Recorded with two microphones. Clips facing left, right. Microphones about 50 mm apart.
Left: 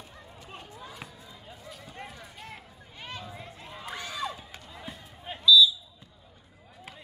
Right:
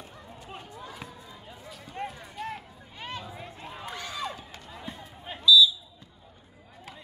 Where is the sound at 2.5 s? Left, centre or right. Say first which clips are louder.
Right 6 dB; right.